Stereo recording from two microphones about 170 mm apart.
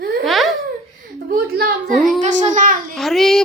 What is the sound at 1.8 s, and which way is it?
Speech, centre (ahead or behind).